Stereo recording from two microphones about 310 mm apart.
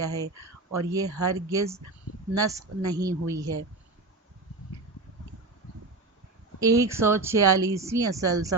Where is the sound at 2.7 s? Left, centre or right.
Right.